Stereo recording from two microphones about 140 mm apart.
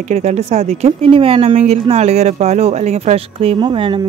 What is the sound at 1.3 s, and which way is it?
Speech, 55° right (ahead or behind).